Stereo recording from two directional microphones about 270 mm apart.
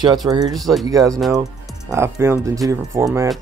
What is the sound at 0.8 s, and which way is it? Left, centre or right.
Speech, centre.